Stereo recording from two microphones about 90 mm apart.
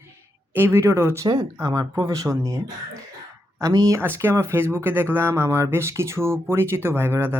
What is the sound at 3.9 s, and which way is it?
Speech, 25° right (ahead or behind).